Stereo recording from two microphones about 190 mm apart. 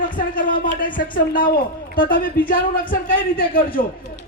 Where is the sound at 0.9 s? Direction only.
45° left (ahead or behind).